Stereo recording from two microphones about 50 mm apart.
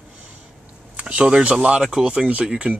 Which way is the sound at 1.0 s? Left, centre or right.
Right.